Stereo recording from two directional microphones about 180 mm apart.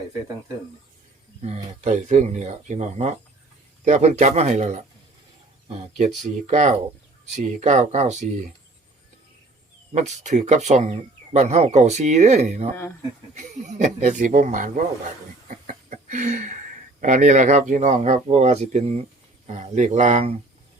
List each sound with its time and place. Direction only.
1.4 s speech: 40° right (ahead or behind)
9.9 s speech: 40° right (ahead or behind)
15.4 s a sound: 45° right (ahead or behind)
17.0 s speech: 45° right (ahead or behind)